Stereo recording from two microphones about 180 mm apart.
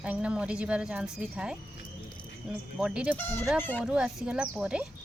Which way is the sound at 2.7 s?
5° right (ahead or behind).